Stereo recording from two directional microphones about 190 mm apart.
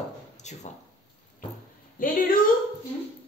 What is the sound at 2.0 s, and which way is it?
Speech, 45° left (ahead or behind).